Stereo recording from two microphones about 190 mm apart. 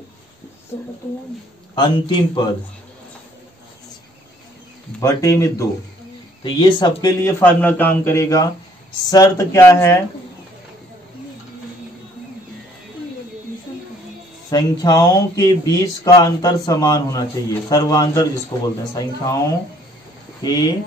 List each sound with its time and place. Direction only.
1.8 s speech: 25° left (ahead or behind)
5.0 s speech: 15° left (ahead or behind)
14.5 s speech: 20° left (ahead or behind)